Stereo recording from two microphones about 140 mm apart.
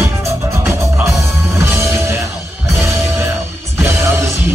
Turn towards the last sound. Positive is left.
turn(degrees=-20)  # may be behind; listen again after turning